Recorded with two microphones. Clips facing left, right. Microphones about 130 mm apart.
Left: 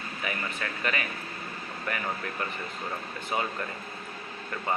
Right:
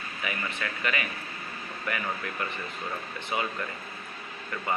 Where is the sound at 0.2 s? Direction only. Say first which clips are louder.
Even; 35° left (ahead or behind).